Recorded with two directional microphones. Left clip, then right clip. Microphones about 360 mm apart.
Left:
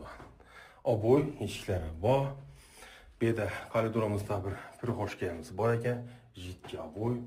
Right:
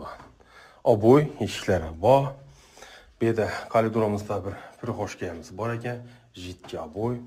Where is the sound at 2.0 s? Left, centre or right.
Centre.